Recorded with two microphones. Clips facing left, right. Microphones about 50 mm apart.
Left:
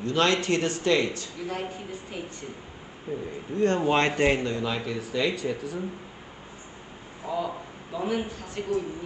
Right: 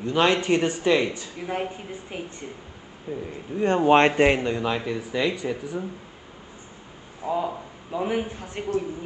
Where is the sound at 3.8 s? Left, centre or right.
Right.